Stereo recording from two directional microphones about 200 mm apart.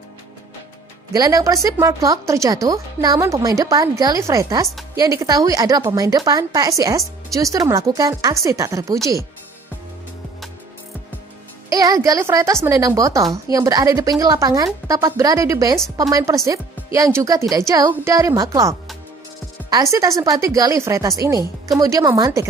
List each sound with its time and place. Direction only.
1.1 s a woman's voice: 15° right (ahead or behind)
11.7 s a woman's voice: 15° right (ahead or behind)